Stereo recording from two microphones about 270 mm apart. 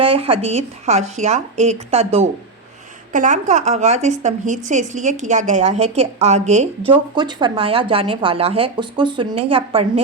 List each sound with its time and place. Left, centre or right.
0.0 s a woman's voice: right
3.1 s a woman's voice: right